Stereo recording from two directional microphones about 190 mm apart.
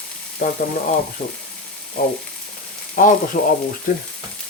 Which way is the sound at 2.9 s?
45° left (ahead or behind).